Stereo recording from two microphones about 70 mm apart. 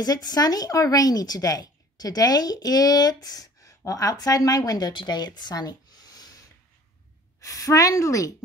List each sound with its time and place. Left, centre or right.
0.0 s speech: left
7.3 s a woman's voice: left